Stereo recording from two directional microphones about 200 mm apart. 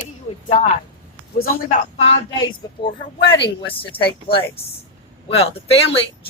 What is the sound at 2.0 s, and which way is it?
Speech, 25° left (ahead or behind).